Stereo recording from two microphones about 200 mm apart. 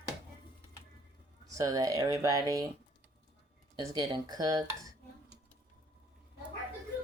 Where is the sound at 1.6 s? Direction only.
15° right (ahead or behind).